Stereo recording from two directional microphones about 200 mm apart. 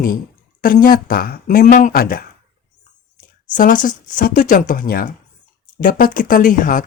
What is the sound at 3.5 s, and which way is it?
Speech, 40° left (ahead or behind).